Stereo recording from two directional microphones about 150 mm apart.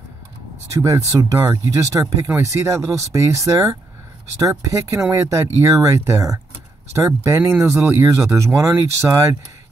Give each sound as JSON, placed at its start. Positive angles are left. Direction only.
{"t": 0.8, "sound": "speech", "side_deg": -20}